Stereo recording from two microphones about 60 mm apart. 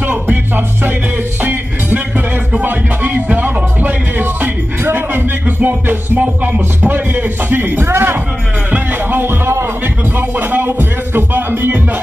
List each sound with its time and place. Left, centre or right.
0.0 s music: right
6.8 s speech: right
8.7 s music: right